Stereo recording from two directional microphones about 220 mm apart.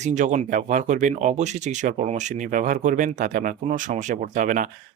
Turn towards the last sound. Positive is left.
turn(degrees=-35)  # may be behind; listen again after turning